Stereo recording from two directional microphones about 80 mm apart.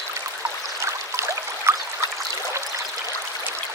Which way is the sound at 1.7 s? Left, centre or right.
Right.